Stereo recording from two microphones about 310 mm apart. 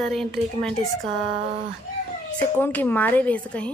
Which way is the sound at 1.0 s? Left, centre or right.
Centre.